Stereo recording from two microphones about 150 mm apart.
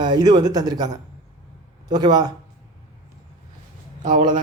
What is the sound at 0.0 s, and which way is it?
Speech, 30° right (ahead or behind).